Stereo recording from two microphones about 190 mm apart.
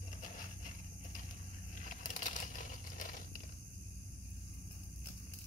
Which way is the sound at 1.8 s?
40° left (ahead or behind).